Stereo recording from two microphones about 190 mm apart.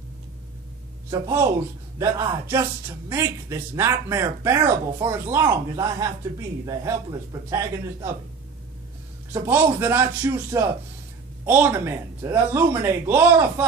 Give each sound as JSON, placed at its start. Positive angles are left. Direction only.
{"t": 1.1, "sound": "a man's voice", "side_deg": -15}
{"t": 9.3, "sound": "a man's voice", "side_deg": -10}